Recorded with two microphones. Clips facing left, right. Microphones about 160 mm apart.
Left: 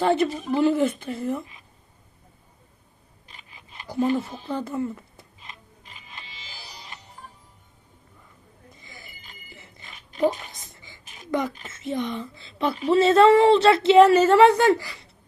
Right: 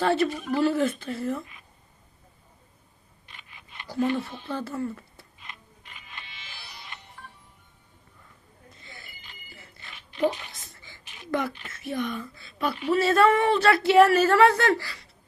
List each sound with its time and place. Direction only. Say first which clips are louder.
0.0 s speech: left 2 dB; 15° left (ahead or behind)
0.3 s speech: left 1 dB; 35° left (ahead or behind)
0.5 s speech: left 4 dB; 20° left (ahead or behind)
3.2 s camera: left 1 dB; 35° left (ahead or behind)
4.4 s speech: left 3 dB; 15° left (ahead or behind)
5.5 s music: left 1 dB; 35° left (ahead or behind)
8.7 s bicycle bell: even; 15° left (ahead or behind)
9.0 s bicycle bell: left 2 dB; 45° left (ahead or behind)
9.5 s a sound: left 2 dB; 20° left (ahead or behind)
9.9 s a sound: left 3 dB; 45° left (ahead or behind)
10.5 s a sound: left 2 dB; 15° left (ahead or behind)
11.0 s a sound: even; 45° left (ahead or behind)
11.3 s speech: left 2 dB; 15° left (ahead or behind)